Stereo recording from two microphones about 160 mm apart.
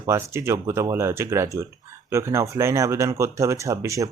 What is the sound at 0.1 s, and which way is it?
Speech, 15° right (ahead or behind).